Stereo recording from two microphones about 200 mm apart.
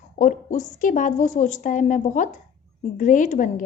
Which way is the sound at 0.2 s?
40° left (ahead or behind).